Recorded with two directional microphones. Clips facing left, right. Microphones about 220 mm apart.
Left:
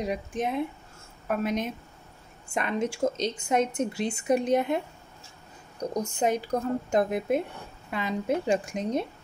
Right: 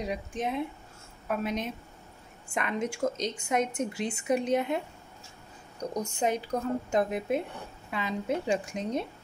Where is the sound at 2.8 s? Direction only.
30° left (ahead or behind).